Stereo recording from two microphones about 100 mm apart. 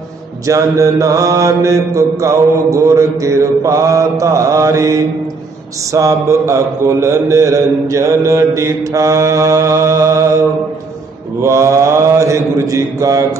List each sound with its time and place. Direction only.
0.5 s mantra: 35° right (ahead or behind)
11.4 s mantra: 30° right (ahead or behind)